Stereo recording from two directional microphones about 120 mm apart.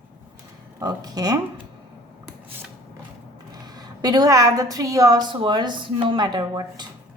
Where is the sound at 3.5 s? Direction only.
35° right (ahead or behind).